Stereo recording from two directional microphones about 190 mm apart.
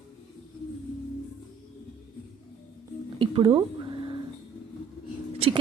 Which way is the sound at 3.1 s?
25° right (ahead or behind).